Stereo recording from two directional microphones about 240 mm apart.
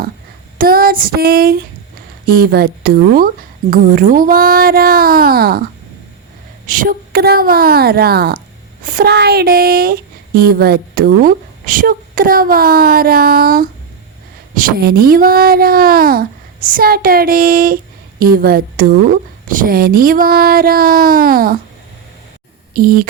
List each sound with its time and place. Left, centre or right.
0.6 s female singing: right
2.2 s speech: right
6.7 s speech: right
22.7 s speech: right